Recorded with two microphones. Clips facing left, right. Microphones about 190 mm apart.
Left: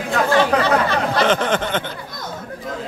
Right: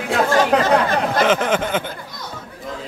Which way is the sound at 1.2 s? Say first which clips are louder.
Right 1 dB; 5° right (ahead or behind).